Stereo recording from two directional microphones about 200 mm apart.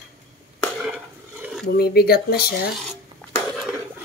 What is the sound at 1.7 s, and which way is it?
Speech, 50° left (ahead or behind).